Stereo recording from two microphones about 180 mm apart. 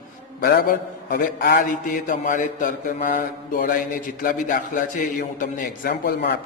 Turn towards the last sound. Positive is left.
turn(degrees=60)  # may be behind; listen again after turning